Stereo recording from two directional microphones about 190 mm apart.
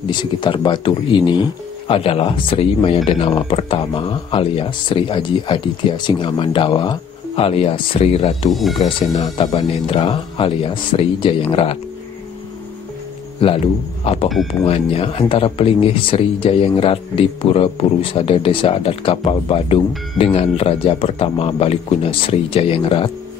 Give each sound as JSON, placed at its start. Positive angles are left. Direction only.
{"t": 0.1, "sound": "speech", "side_deg": 25}
{"t": 13.4, "sound": "speech", "side_deg": 30}